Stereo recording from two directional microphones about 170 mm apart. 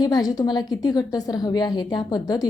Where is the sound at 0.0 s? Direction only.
25° left (ahead or behind).